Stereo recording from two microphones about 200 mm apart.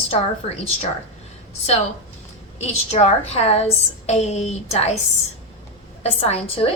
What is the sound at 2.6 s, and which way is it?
A woman's voice, 35° left (ahead or behind).